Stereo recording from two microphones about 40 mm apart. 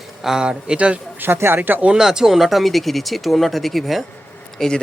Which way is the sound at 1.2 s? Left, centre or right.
Right.